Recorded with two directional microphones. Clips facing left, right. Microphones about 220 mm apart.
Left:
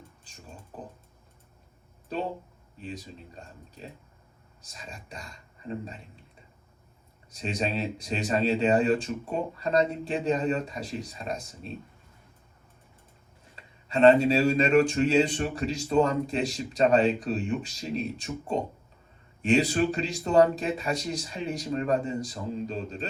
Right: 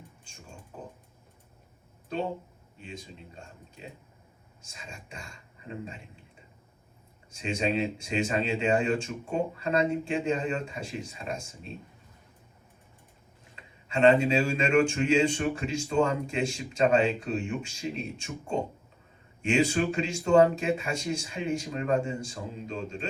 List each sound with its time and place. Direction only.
2.8 s speech: 35° left (ahead or behind)
7.3 s speech: 35° left (ahead or behind)
13.8 s speech: 35° left (ahead or behind)